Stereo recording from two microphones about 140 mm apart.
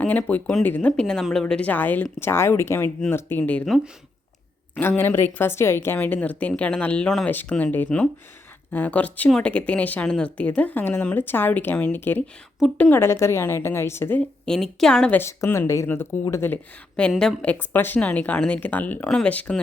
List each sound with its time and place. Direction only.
0.0 s speech: 10° left (ahead or behind)
4.7 s speech: 15° left (ahead or behind)
15.2 s speech: 20° left (ahead or behind)
17.0 s speech: 5° left (ahead or behind)